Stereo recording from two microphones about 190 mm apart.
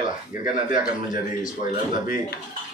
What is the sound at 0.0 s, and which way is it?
Speech, 45° left (ahead or behind).